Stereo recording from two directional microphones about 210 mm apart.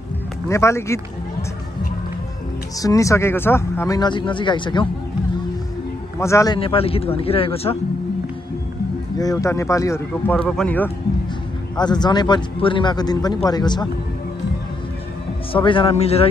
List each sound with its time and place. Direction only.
0.5 s speech: 15° left (ahead or behind)
2.8 s speech: 15° left (ahead or behind)
6.1 s speech: 15° left (ahead or behind)
9.2 s speech: 15° left (ahead or behind)
11.7 s speech: 20° left (ahead or behind)
15.5 s speech: 25° left (ahead or behind)